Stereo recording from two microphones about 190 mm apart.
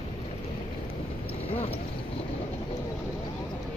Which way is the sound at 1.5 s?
30° left (ahead or behind).